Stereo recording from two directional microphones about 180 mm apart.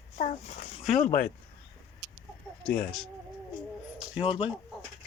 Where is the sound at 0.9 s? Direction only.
50° left (ahead or behind).